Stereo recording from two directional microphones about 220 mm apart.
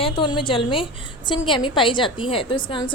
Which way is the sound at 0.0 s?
20° left (ahead or behind).